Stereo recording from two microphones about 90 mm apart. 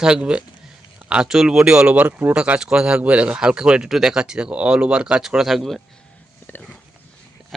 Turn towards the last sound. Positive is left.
turn(degrees=25)  # may be behind; listen again after turning